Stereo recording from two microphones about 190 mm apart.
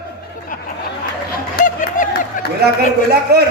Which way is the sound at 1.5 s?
40° left (ahead or behind).